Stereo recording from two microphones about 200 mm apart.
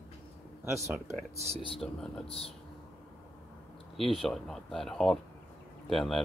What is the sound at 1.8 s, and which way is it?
Speech, centre (ahead or behind).